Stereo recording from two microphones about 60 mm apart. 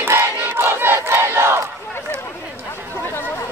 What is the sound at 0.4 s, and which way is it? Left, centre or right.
Battle cry, right.